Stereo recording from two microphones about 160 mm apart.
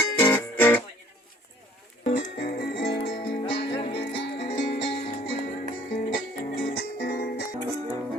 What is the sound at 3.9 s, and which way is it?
Music, 90° left.